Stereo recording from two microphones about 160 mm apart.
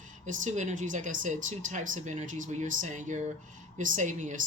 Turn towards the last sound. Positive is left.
turn(degrees=-50)  # may be behind; listen again after turning